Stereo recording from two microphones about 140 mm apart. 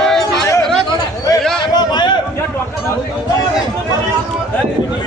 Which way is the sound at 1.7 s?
30° left (ahead or behind).